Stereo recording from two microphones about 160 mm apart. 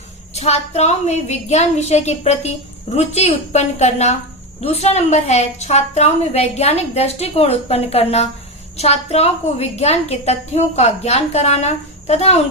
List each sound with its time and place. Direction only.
0.3 s a woman's voice: 40° left (ahead or behind)